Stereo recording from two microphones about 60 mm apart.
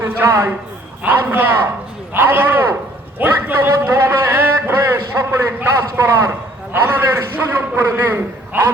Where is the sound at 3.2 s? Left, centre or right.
Right.